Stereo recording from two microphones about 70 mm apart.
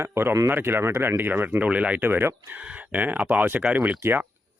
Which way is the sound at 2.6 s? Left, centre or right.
Centre.